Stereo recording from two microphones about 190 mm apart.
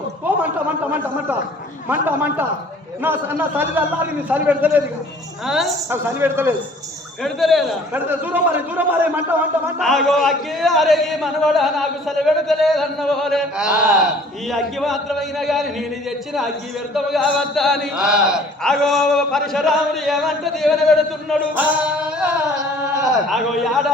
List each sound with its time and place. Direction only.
1.9 s a man's voice: 10° right (ahead or behind)
5.9 s a man's voice: 10° right (ahead or behind)
7.2 s a man's voice: centre (ahead or behind)
9.8 s a man's voice: centre (ahead or behind)